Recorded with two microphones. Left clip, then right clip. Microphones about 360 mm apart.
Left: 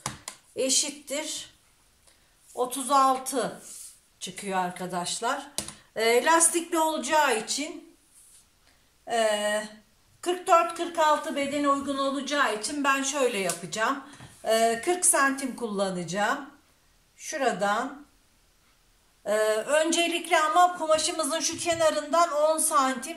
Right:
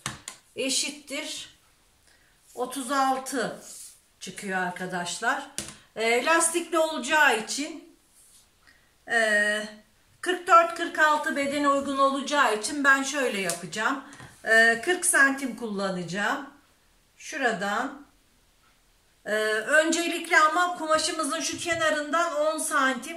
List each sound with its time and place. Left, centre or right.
0.0 s a sound: centre
2.5 s speech: centre
9.0 s speech: centre
19.2 s speech: centre